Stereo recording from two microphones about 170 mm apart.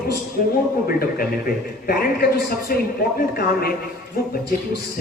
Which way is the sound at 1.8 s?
65° left (ahead or behind).